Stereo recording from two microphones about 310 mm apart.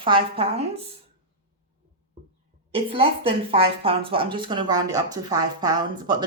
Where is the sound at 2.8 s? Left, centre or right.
Centre.